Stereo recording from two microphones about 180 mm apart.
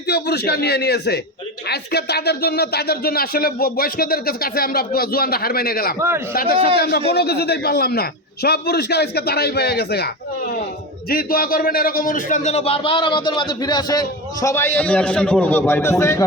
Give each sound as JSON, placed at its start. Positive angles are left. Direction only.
{"t": 0.1, "sound": "speech", "side_deg": 65}
{"t": 6.0, "sound": "a man's voice", "side_deg": -15}
{"t": 6.3, "sound": "speech", "side_deg": 55}
{"t": 11.1, "sound": "a man's voice", "side_deg": 55}